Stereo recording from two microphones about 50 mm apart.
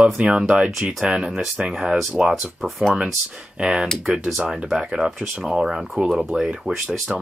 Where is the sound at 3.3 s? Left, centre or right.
Centre.